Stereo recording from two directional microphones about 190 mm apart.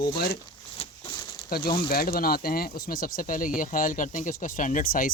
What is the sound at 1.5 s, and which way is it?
Speech, 55° left (ahead or behind).